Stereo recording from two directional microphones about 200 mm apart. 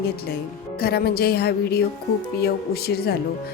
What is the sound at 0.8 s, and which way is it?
Speech, 50° left (ahead or behind).